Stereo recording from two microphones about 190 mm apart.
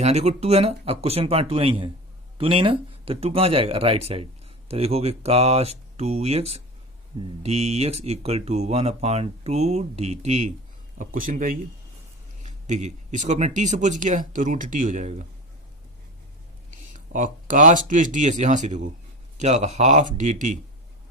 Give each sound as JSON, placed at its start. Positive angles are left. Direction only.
{"t": 0.0, "sound": "speech", "side_deg": -35}
{"t": 10.9, "sound": "speech", "side_deg": -45}
{"t": 16.7, "sound": "speech", "side_deg": -45}